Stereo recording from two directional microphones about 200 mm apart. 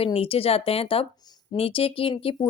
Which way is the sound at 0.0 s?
30° left (ahead or behind).